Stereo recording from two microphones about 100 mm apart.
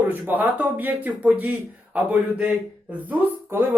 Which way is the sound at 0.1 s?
20° right (ahead or behind).